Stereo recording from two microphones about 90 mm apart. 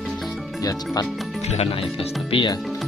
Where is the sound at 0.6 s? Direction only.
40° left (ahead or behind).